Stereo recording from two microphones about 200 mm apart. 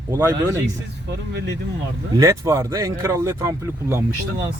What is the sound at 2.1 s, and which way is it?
Speech, 15° right (ahead or behind).